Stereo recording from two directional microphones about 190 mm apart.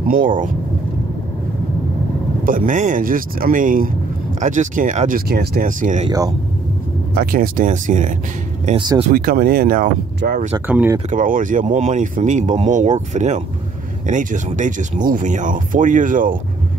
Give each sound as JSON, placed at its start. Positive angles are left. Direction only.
{"t": 0.1, "sound": "speech", "side_deg": -45}
{"t": 2.4, "sound": "speech", "side_deg": -45}
{"t": 6.0, "sound": "speech", "side_deg": -20}
{"t": 7.2, "sound": "speech", "side_deg": -50}
{"t": 8.7, "sound": "speech", "side_deg": -25}
{"t": 9.1, "sound": "speech", "side_deg": -50}
{"t": 10.5, "sound": "speech", "side_deg": -10}
{"t": 11.1, "sound": "speech", "side_deg": -45}